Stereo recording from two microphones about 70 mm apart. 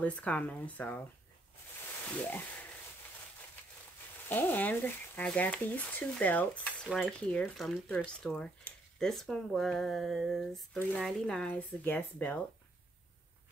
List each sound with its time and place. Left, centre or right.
0.0 s speech: left
2.0 s a sound: left
4.3 s speech: left; by 11.2 s centre
11.4 s speech: left